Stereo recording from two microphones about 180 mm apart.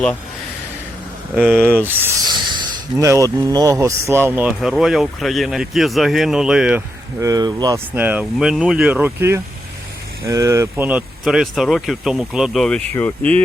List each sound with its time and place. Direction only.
1.4 s speech: 5° left (ahead or behind)
1.6 s speech: 10° right (ahead or behind)
7.2 s speech: 20° right (ahead or behind)
7.9 s speech: 10° right (ahead or behind); by 13.4 s 10° left (ahead or behind)